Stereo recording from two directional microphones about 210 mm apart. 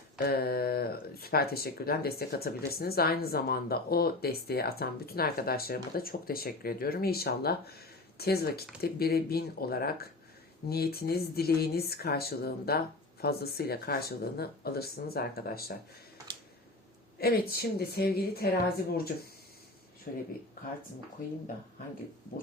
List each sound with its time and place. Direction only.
0.2 s speech: 50° left (ahead or behind)
17.2 s speech: 45° left (ahead or behind)